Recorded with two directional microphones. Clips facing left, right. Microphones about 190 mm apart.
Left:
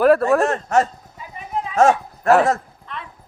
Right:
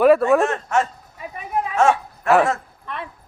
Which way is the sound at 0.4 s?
40° left (ahead or behind).